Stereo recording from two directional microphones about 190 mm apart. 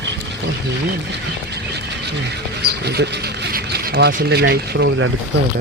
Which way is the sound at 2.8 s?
60° right (ahead or behind).